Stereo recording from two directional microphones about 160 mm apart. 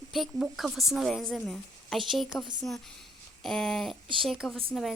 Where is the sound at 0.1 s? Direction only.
Centre (ahead or behind).